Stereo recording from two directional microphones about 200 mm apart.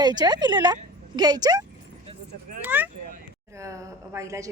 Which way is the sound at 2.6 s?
10° right (ahead or behind).